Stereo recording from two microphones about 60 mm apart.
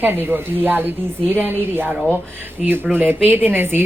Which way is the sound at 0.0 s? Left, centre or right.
Right.